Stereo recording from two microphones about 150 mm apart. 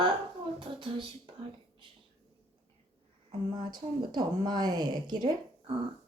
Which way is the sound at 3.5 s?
30° right (ahead or behind).